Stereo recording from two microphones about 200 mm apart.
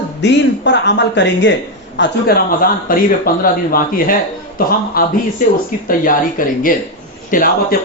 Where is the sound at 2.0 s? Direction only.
50° left (ahead or behind).